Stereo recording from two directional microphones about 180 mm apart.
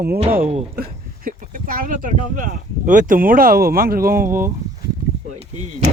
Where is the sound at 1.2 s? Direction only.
50° right (ahead or behind).